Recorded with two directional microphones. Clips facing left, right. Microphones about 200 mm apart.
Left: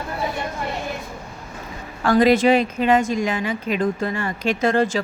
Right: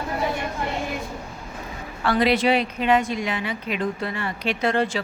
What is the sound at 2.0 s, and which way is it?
A woman's voice, 45° left (ahead or behind).